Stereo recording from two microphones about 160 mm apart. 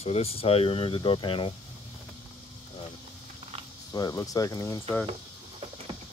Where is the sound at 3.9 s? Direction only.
20° left (ahead or behind).